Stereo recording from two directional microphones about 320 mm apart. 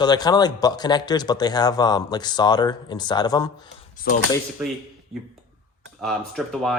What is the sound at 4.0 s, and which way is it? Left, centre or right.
Speech, left.